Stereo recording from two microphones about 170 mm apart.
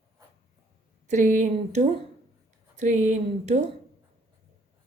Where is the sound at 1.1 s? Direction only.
45° right (ahead or behind).